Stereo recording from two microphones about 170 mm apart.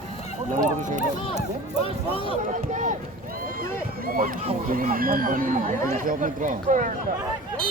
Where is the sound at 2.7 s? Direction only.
45° right (ahead or behind).